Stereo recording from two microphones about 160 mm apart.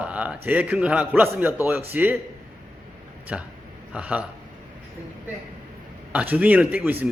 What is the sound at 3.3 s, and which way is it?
Speech, 5° right (ahead or behind).